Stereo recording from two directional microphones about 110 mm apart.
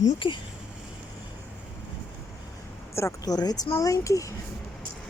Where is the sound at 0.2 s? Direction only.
50° left (ahead or behind).